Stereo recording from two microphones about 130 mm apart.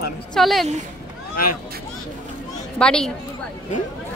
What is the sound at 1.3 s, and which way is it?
Speech, 90° left.